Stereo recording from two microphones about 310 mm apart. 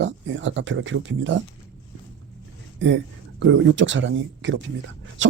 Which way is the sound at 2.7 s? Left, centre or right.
Right.